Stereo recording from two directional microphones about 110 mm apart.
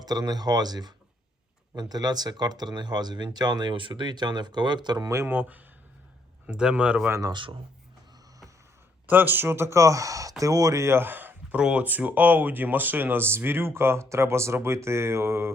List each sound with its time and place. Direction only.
0.0 s speech: 35° right (ahead or behind)
5.1 s speech: 20° right (ahead or behind)
7.1 s speech: 30° right (ahead or behind)
9.0 s speech: 15° right (ahead or behind)